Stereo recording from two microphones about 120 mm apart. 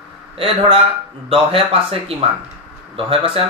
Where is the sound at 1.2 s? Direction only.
55° right (ahead or behind).